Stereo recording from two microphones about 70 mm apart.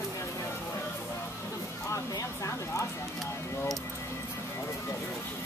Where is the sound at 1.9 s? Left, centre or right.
Left.